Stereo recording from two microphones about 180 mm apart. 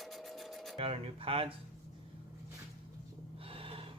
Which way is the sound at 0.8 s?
30° right (ahead or behind).